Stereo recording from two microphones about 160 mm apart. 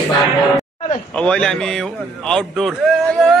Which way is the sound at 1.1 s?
5° left (ahead or behind).